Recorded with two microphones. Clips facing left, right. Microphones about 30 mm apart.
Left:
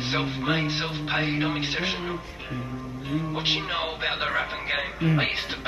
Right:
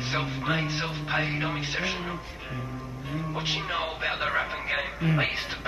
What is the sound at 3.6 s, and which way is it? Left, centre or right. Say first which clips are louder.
Speech: left 1 dB; centre.